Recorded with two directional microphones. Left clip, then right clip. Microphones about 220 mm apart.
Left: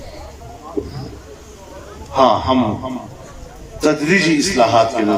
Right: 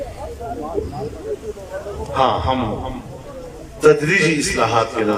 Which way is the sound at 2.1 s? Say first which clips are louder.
Left 4 dB; 20° left (ahead or behind).